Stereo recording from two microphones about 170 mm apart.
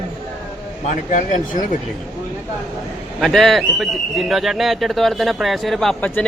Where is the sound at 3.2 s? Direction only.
Centre (ahead or behind).